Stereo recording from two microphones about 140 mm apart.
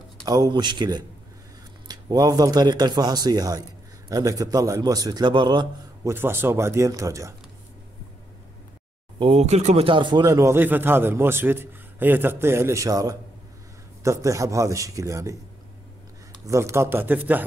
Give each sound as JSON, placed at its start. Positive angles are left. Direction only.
{"t": 0.2, "sound": "speech", "side_deg": -30}
{"t": 6.0, "sound": "speech", "side_deg": -15}
{"t": 9.2, "sound": "speech", "side_deg": -45}
{"t": 9.8, "sound": "a man's voice", "side_deg": -35}
{"t": 16.4, "sound": "a man's voice", "side_deg": -20}